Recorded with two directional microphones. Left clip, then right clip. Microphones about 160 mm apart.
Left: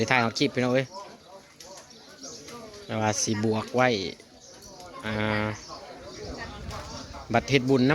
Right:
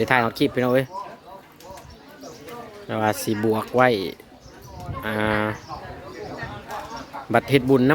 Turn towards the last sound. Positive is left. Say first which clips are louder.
# right 5 dB
turn(degrees=-25)  # may be behind; listen again after turning